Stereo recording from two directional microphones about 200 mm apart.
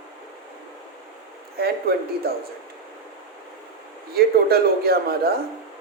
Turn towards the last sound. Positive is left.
turn(degrees=-50)  # may be behind; listen again after turning